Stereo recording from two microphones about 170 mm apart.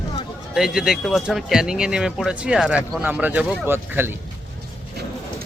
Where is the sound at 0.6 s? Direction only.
5° right (ahead or behind).